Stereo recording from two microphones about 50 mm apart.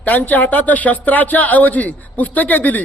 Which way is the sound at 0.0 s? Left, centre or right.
Left.